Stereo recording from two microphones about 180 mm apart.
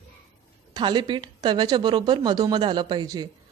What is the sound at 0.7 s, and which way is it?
Speech, 25° right (ahead or behind).